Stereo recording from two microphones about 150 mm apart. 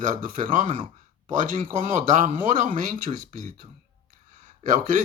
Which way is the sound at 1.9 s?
60° right (ahead or behind).